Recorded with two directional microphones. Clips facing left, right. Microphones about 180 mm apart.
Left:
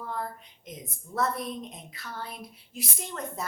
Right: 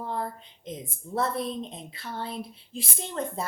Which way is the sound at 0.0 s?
25° right (ahead or behind).